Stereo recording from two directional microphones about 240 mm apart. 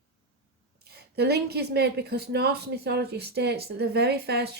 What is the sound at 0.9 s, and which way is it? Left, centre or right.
Speech, right.